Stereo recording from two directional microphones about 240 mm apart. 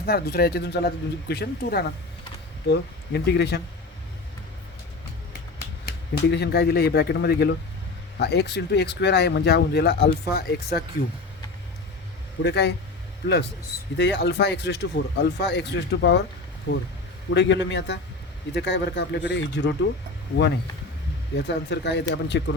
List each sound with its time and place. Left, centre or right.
0.0 s speech: left
6.2 s speech: left
12.4 s speech: left
13.9 s speech: left
21.3 s speech: left